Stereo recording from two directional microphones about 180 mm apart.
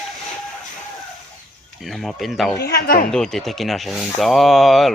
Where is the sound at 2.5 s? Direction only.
65° left (ahead or behind).